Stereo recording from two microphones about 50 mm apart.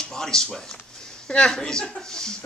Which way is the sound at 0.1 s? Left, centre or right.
Centre.